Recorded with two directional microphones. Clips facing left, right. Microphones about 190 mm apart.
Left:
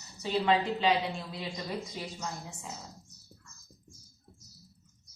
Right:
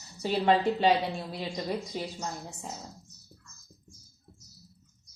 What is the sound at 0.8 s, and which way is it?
A woman's voice, 45° right (ahead or behind).